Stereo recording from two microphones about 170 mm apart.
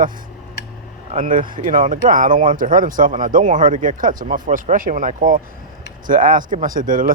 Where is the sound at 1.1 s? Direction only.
50° right (ahead or behind).